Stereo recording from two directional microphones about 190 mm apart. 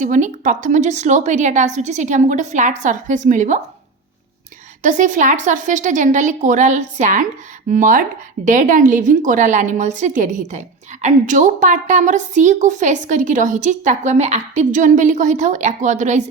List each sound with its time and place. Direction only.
0.0 s a woman's voice: 40° right (ahead or behind)
4.8 s a woman's voice: 40° right (ahead or behind)